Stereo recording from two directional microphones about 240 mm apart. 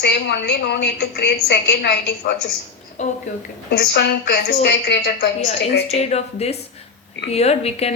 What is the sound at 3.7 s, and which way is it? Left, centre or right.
A woman's voice, left.